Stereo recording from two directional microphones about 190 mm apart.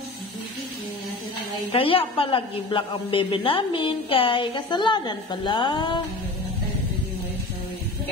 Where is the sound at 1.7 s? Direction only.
30° left (ahead or behind).